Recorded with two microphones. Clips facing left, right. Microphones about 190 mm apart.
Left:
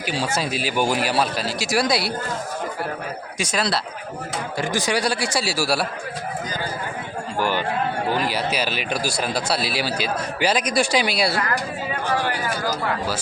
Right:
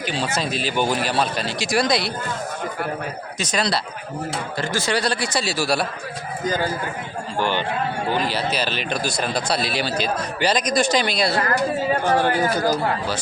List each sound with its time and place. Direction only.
0.0 s speech: 10° left (ahead or behind)
3.3 s speech: 10° left (ahead or behind)
4.5 s speech: 15° left (ahead or behind)
7.3 s speech: 5° left (ahead or behind)
11.3 s a sound: 40° right (ahead or behind)
12.5 s speech: 45° right (ahead or behind)